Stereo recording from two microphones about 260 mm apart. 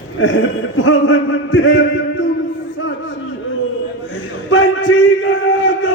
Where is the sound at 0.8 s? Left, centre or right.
Left.